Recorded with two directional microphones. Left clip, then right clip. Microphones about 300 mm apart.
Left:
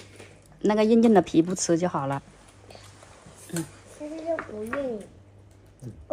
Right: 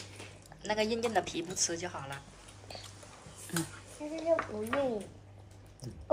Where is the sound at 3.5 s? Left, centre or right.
Centre.